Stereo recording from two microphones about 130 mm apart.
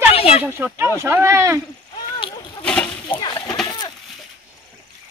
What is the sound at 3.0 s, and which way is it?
Splash, 35° left (ahead or behind).